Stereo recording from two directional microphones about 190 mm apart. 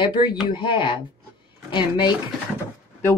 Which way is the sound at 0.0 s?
25° left (ahead or behind).